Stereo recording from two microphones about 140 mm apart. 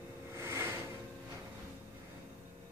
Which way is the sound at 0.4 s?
20° right (ahead or behind).